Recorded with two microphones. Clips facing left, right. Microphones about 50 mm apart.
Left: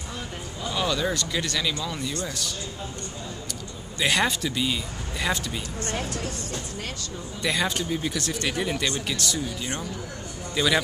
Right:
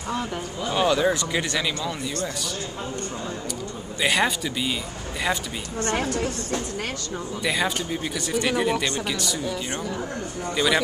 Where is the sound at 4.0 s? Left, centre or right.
Centre.